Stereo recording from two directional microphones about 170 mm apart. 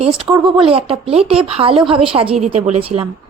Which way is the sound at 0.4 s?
30° right (ahead or behind).